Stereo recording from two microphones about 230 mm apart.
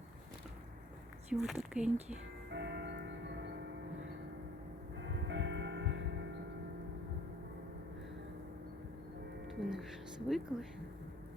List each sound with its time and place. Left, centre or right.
1.3 s speech: centre
2.5 s music: right
5.3 s music: right
9.5 s music: centre